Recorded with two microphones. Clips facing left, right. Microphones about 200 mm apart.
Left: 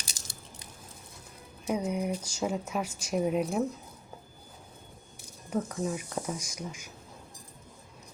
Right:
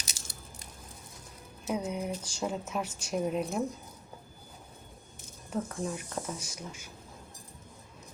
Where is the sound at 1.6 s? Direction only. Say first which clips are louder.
Left 3 dB; 10° left (ahead or behind).